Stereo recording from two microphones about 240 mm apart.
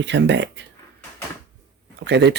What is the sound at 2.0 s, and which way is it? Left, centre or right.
Speech, right.